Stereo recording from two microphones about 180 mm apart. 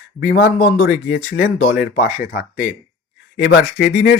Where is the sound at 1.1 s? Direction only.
50° left (ahead or behind).